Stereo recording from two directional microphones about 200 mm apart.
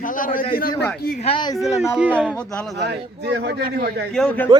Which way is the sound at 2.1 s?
5° left (ahead or behind).